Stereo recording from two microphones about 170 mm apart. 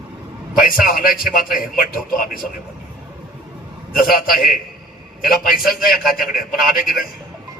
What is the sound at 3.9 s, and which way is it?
A man's voice, 60° left (ahead or behind).